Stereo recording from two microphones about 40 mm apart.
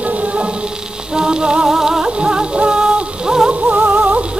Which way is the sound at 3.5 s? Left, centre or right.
Right.